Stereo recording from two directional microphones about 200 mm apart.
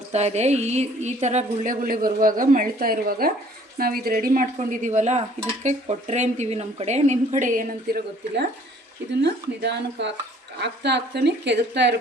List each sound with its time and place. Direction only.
0.1 s a woman's voice: 35° right (ahead or behind); by 11.9 s 60° right (ahead or behind)